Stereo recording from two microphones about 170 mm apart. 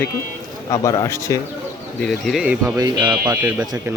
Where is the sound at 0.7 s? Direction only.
20° left (ahead or behind).